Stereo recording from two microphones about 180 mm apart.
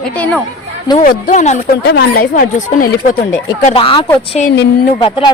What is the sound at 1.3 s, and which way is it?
Speech, 40° left (ahead or behind).